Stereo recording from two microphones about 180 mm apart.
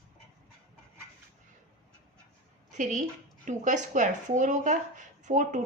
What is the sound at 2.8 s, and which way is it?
A woman's voice, 45° right (ahead or behind).